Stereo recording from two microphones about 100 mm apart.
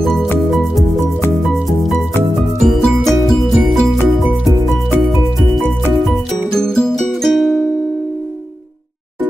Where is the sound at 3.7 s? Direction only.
Centre (ahead or behind).